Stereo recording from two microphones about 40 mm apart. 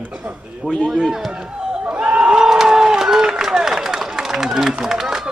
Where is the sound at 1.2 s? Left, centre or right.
Centre.